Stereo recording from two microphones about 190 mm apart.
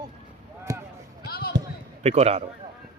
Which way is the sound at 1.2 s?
50° left (ahead or behind).